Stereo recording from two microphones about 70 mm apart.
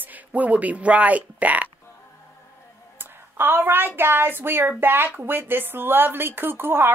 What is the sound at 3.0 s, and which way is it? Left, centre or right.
Speech, right.